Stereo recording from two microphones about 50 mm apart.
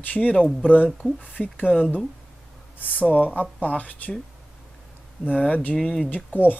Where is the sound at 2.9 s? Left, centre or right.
Left.